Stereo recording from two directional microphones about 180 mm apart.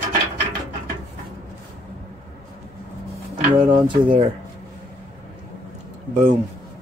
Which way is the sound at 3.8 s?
25° right (ahead or behind).